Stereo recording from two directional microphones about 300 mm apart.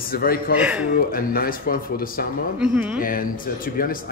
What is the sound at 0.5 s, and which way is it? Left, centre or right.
Speech, centre.